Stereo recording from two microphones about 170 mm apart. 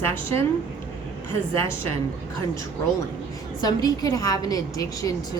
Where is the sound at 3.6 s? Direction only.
25° left (ahead or behind).